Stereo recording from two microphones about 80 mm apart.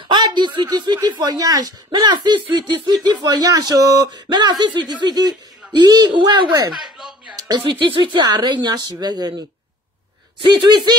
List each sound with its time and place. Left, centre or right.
0.1 s a sound: right
0.7 s speech: right
2.5 s speech: right
3.4 s speech: right
4.3 s speech: right
6.1 s speech: right
6.7 s a sound: centre
7.3 s speech: right
7.8 s speech: right